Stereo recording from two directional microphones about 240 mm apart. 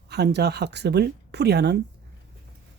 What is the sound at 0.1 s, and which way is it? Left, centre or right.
Speech, right.